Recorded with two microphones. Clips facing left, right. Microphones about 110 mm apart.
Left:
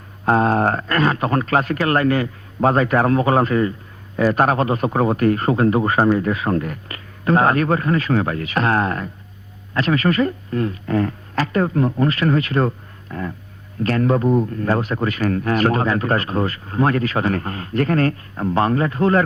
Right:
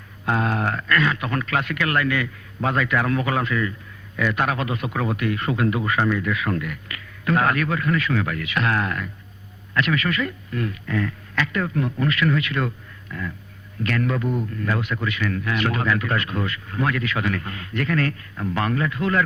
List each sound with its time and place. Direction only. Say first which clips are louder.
0.3 s a man's voice: left 7 dB; 35° left (ahead or behind)